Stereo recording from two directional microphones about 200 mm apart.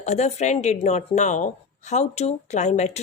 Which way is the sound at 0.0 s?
35° left (ahead or behind).